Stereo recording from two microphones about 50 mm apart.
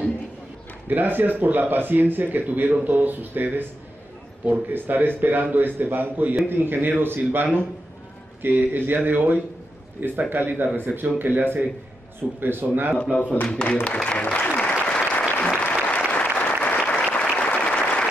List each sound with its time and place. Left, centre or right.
0.8 s a man's voice: right
12.9 s speech: left
14.2 s applause: left